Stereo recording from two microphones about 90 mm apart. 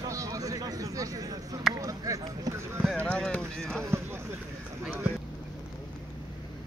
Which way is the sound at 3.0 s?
15° left (ahead or behind).